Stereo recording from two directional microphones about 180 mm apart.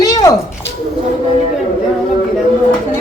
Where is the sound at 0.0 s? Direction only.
20° left (ahead or behind).